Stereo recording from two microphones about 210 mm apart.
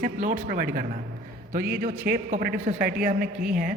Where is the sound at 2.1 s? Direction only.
40° right (ahead or behind).